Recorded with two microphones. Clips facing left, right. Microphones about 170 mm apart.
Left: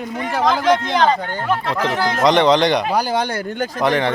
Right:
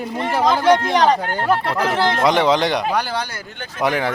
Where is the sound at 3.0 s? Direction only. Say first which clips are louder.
Left 4 dB; 45° left (ahead or behind).